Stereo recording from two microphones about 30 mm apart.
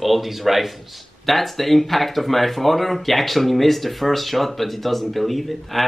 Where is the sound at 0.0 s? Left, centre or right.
Centre.